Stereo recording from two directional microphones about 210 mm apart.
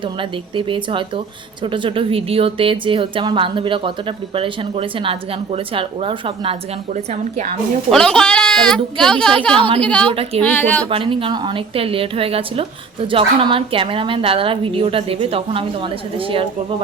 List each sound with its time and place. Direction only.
0.0 s a woman's voice: 25° right (ahead or behind)
7.9 s speech: centre (ahead or behind)
9.6 s a woman's voice: 25° right (ahead or behind)
9.8 s speech: 5° left (ahead or behind)
10.1 s a woman's voice: 25° right (ahead or behind)
10.4 s speech: 10° left (ahead or behind)
10.8 s a woman's voice: 25° right (ahead or behind)